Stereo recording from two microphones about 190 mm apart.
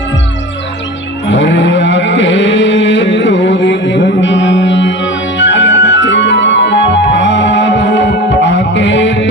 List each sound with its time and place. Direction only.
1.3 s music: 75° left (ahead or behind)